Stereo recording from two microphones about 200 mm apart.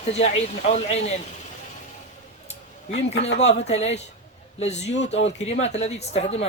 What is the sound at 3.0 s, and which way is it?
A woman's voice, 35° left (ahead or behind).